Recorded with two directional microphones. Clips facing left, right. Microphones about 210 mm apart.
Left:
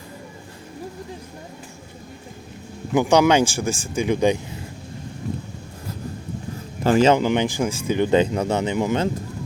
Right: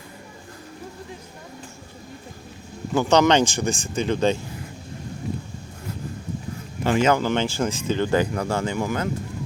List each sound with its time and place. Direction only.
2.9 s speech: 15° left (ahead or behind)
6.8 s speech: 35° left (ahead or behind)
7.1 s speech: 15° left (ahead or behind)